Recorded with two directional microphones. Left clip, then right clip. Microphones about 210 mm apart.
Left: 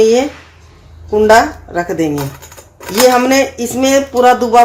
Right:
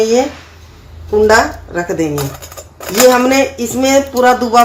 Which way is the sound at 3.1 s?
25° left (ahead or behind).